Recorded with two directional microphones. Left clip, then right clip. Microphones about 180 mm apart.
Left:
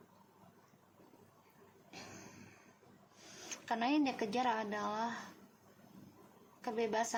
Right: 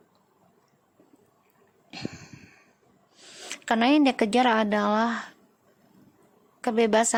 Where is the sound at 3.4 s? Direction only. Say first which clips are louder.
Right 13 dB; 60° right (ahead or behind).